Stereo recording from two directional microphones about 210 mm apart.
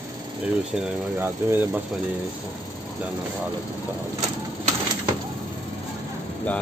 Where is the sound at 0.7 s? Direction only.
10° right (ahead or behind).